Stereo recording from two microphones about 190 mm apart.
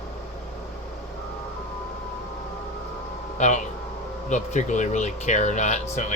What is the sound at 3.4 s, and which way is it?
Speech, 40° left (ahead or behind).